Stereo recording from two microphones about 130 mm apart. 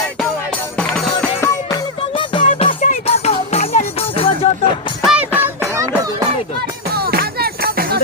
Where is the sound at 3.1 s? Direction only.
55° left (ahead or behind).